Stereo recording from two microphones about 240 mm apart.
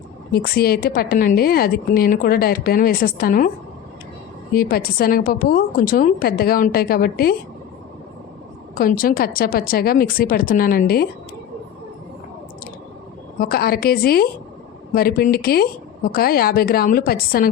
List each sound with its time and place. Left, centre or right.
0.3 s a woman's voice: left
4.5 s a woman's voice: left
8.8 s a woman's voice: left
13.4 s a woman's voice: left